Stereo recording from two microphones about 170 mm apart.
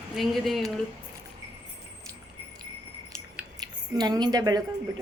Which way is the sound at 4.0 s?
25° right (ahead or behind).